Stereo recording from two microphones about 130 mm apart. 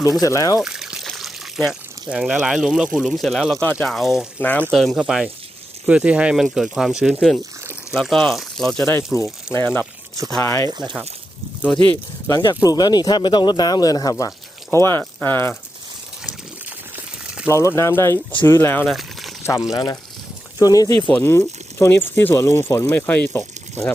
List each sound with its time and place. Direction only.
0.0 s speech: 25° left (ahead or behind)
0.6 s speech: 5° right (ahead or behind)
4.4 s speech: 10° left (ahead or behind)
4.7 s speech: centre (ahead or behind)
9.1 s speech: 20° left (ahead or behind)
10.7 s speech: 35° right (ahead or behind)
12.3 s speech: 30° left (ahead or behind)
17.5 s speech: 20° left (ahead or behind)
18.9 s a sound: centre (ahead or behind)
19.7 s speech: 30° left (ahead or behind)